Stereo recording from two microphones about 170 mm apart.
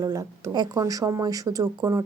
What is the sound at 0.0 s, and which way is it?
A woman's voice, 20° right (ahead or behind).